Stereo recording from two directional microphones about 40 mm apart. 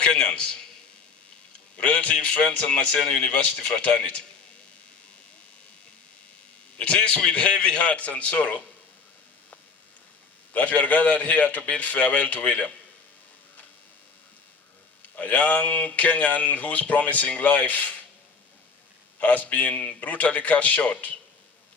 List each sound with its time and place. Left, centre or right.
0.0 s a man's voice: left
1.8 s a man's voice: left
6.7 s a man's voice: left
7.9 s speech: left
10.5 s speech: left
15.1 s speech: left
19.2 s speech: left